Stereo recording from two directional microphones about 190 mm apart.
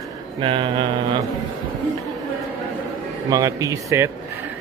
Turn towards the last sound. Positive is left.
turn(degrees=-15)  # may be behind; listen again after turning